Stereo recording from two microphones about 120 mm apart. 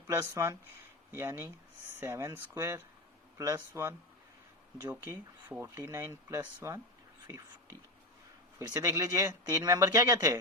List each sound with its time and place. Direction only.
0.1 s speech: 20° right (ahead or behind)
5.0 s speech: 15° right (ahead or behind)
8.5 s speech: 25° right (ahead or behind)